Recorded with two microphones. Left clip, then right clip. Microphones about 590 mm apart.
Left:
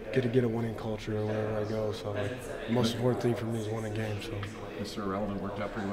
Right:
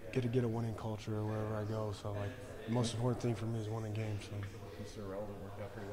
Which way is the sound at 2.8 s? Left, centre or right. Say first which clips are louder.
Left 10 dB; right.